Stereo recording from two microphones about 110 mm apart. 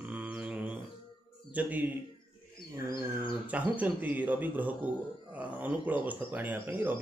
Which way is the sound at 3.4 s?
15° right (ahead or behind).